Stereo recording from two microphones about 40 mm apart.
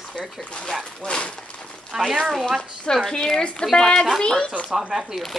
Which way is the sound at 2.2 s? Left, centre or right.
Centre.